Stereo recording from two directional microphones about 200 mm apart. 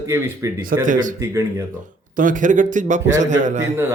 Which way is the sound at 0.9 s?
40° right (ahead or behind).